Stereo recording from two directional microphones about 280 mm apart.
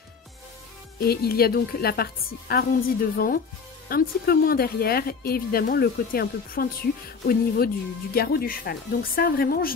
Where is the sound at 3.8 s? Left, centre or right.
Left.